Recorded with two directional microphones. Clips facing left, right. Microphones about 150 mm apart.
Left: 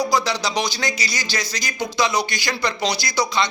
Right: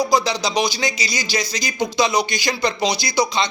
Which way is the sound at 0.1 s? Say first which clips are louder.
Right 2 dB; 15° right (ahead or behind).